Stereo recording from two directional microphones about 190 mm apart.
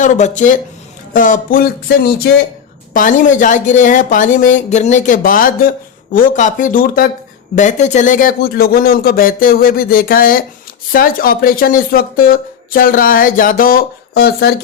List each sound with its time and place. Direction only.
0.0 s speech: 40° left (ahead or behind)
2.9 s speech: 45° left (ahead or behind)